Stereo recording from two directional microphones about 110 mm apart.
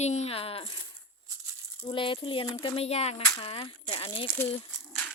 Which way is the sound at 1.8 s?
50° left (ahead or behind).